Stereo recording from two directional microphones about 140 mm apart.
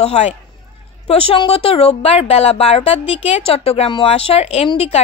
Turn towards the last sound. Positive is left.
turn(degrees=45)  # may be behind; listen again after turning